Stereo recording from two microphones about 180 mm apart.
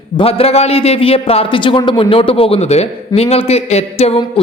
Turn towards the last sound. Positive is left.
turn(degrees=35)  # may be behind; listen again after turning